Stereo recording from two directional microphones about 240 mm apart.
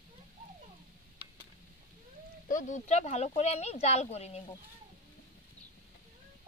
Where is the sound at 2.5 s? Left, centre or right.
Left.